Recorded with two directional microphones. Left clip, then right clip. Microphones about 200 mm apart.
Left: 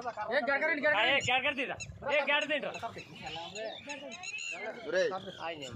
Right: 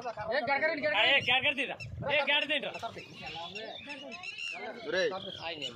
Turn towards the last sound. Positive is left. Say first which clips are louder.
# even
turn(degrees=-25)  # may be behind; listen again after turning